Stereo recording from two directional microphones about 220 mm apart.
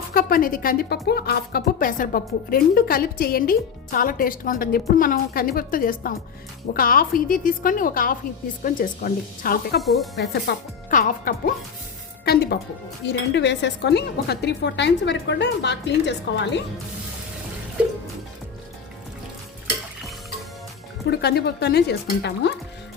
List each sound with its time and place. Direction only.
0.1 s speech: 40° left (ahead or behind)
21.1 s speech: 50° left (ahead or behind)